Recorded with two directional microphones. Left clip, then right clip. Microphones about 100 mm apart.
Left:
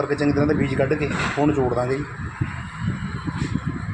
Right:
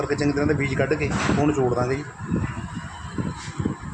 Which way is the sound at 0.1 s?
25° left (ahead or behind).